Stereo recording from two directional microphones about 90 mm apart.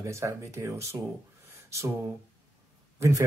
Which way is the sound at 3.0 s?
30° right (ahead or behind).